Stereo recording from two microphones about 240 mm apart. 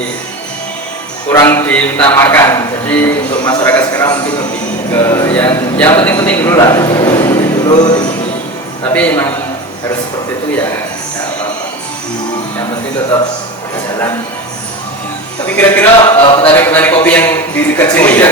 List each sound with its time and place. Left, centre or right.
1.3 s a man's voice: centre
15.5 s a man's voice: centre
16.2 s a sound: left
16.6 s a man's voice: centre